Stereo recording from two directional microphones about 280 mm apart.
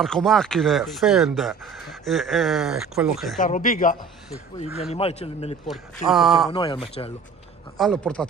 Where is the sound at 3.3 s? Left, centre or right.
Left.